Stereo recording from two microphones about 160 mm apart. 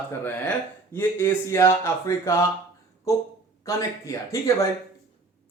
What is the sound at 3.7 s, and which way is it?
Speech, 20° left (ahead or behind).